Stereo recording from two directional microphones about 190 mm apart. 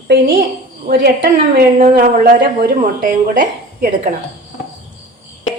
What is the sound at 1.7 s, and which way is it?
A woman's voice, 45° right (ahead or behind).